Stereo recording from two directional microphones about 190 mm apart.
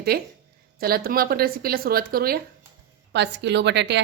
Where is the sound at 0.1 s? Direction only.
55° right (ahead or behind).